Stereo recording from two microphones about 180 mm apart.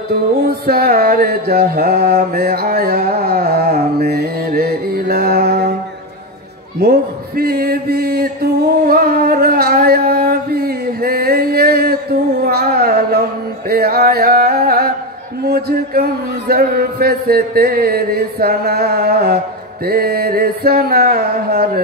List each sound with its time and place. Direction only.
0.5 s mantra: 55° right (ahead or behind)
6.8 s mantra: 55° right (ahead or behind)
13.7 s music: 60° right (ahead or behind)
15.4 s a man's voice: 60° right (ahead or behind)